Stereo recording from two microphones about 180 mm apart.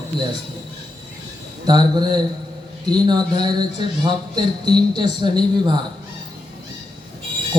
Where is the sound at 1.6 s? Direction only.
25° right (ahead or behind).